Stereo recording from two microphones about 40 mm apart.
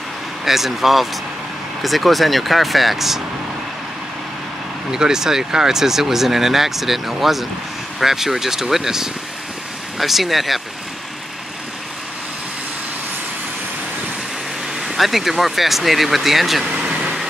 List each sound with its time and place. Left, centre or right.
0.5 s speech: centre
4.9 s speech: centre
14.8 s speech: centre